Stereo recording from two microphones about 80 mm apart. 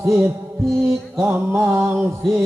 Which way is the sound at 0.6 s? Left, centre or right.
Centre.